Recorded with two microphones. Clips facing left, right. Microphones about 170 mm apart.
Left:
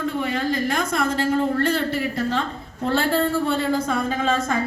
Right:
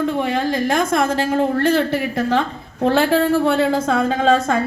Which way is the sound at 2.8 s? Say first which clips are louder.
Right 5 dB; 75° right (ahead or behind).